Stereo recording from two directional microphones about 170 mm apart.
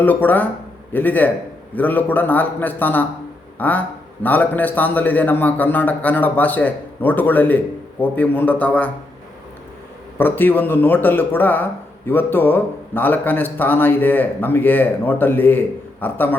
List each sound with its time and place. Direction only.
0.0 s speech: 10° left (ahead or behind)
10.2 s speech: 10° left (ahead or behind)